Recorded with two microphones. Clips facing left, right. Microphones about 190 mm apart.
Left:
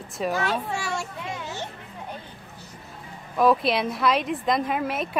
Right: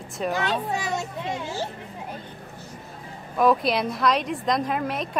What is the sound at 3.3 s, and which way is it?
Speech, centre (ahead or behind).